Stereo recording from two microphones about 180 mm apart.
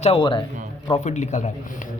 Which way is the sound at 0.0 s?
30° left (ahead or behind).